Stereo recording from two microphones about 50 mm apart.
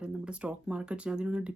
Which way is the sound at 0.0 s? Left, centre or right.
Right.